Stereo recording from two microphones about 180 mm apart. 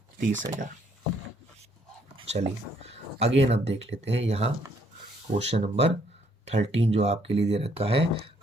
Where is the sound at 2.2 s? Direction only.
35° right (ahead or behind).